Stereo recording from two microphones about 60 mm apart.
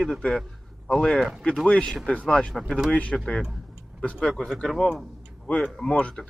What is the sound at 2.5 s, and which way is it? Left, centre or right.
Speech, centre.